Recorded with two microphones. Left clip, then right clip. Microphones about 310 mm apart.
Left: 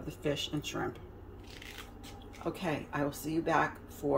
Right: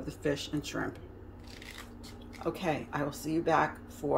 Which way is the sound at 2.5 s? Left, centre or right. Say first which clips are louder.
Right 3 dB; centre.